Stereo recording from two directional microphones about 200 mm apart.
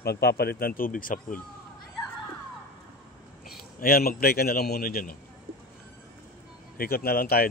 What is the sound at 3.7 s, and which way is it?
Speech, 50° left (ahead or behind).